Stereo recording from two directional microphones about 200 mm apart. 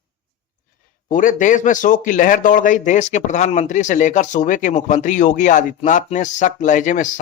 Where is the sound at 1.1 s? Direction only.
40° left (ahead or behind).